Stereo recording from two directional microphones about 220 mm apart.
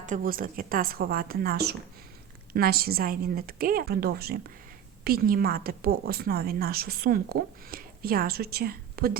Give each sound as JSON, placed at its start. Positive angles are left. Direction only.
{"t": 0.0, "sound": "a woman's voice", "side_deg": -35}